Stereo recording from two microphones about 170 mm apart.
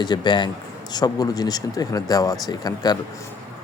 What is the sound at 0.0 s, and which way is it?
Speech, 25° left (ahead or behind).